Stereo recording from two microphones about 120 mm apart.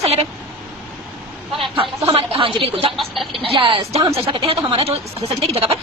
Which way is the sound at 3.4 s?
45° right (ahead or behind).